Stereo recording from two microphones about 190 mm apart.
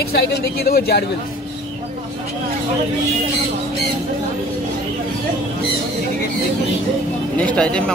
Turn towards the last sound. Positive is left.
turn(degrees=5)  # may be behind; listen again after turning